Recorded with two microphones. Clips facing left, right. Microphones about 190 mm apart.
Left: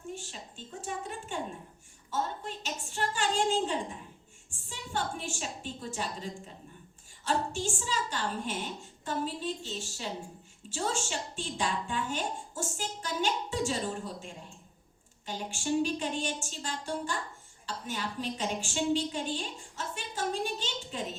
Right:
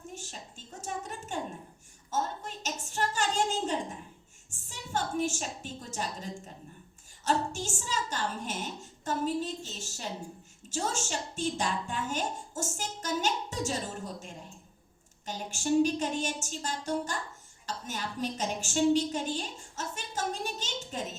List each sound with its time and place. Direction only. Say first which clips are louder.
0.1 s a sound: left 2 dB; 45° right (ahead or behind)
7.3 s a woman's voice: right 1 dB; 45° right (ahead or behind)
15.3 s a woman's voice: right 2 dB; 45° right (ahead or behind)